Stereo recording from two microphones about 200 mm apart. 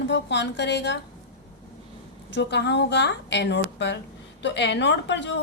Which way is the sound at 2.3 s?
60° left (ahead or behind).